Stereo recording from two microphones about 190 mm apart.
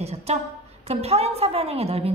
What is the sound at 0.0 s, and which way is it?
A woman's voice, 35° right (ahead or behind).